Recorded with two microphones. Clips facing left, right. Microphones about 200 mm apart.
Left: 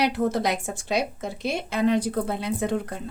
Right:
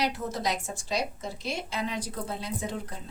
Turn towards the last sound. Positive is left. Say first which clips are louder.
# left 8 dB
turn(degrees=60)  # may be behind; listen again after turning